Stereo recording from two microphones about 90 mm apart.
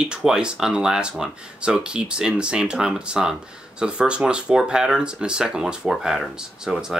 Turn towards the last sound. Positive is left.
turn(degrees=-5)  # may be behind; listen again after turning